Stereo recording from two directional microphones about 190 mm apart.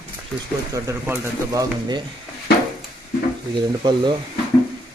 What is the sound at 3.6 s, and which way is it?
Speech, 25° right (ahead or behind).